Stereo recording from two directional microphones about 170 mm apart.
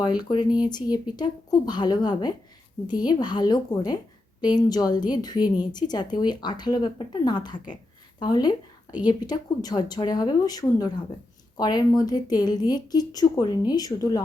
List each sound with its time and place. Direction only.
0.0 s a woman's voice: 25° left (ahead or behind)